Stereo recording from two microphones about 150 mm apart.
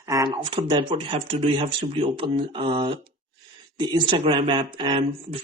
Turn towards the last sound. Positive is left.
turn(degrees=-30)  # may be behind; listen again after turning